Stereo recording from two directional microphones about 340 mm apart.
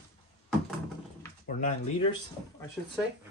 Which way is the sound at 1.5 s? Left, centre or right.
Left.